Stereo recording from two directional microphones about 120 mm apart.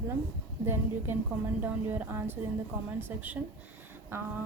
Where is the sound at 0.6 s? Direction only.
20° right (ahead or behind).